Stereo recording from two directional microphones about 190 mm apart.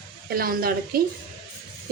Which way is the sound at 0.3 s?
50° right (ahead or behind).